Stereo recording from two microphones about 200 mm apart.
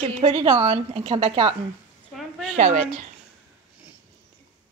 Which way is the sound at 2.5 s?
35° right (ahead or behind).